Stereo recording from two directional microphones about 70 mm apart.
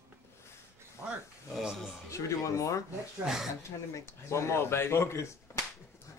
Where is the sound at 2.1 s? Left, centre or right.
Left.